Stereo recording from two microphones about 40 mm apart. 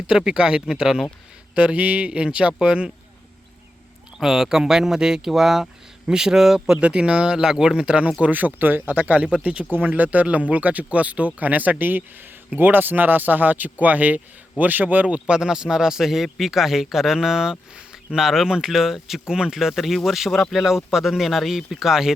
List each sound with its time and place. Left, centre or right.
0.1 s speech: centre
1.5 s speech: right
4.2 s speech: centre
6.7 s speech: right
8.3 s speech: right
9.4 s speech: right
15.0 s speech: right
18.7 s speech: centre